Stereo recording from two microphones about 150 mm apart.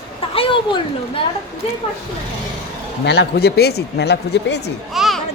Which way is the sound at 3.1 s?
90° left.